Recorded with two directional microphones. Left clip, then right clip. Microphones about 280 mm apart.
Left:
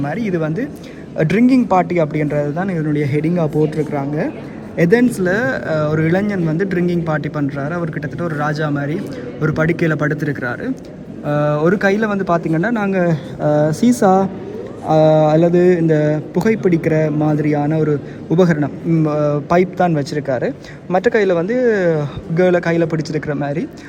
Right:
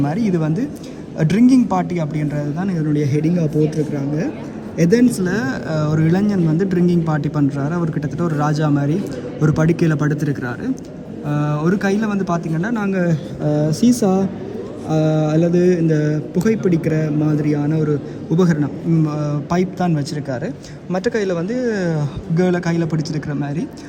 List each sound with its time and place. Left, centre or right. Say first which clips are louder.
0.0 s speech: even; centre
4.8 s speech: left 2 dB; centre
11.3 s speech: left 6 dB; centre
13.4 s speech: left 4 dB; centre
14.8 s speech: left 8 dB; centre